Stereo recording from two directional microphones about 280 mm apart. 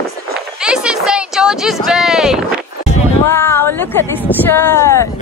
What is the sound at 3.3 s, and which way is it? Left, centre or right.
Speech, centre.